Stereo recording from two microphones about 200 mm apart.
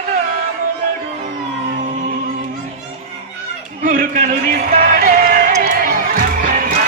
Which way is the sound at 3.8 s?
40° right (ahead or behind).